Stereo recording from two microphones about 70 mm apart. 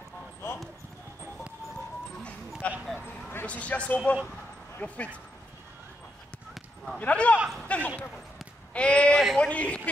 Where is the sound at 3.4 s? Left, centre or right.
Centre.